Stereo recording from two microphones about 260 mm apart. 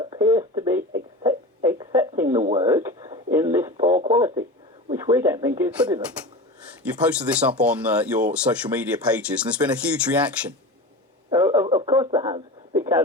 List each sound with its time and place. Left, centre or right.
0.0 s a sound: centre
2.4 s speech: right
2.6 s speech: centre
3.2 s a sound: centre
4.1 s speech: centre
7.0 s speech: centre
11.3 s radio: centre